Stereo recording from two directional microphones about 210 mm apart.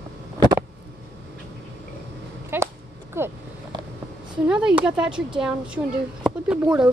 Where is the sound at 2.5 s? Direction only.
10° right (ahead or behind).